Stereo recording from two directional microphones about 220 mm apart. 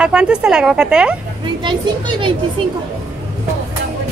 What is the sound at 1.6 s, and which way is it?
Speech, 20° right (ahead or behind).